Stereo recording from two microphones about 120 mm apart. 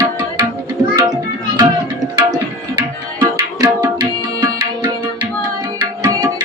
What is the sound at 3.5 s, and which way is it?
Tabla, 35° right (ahead or behind).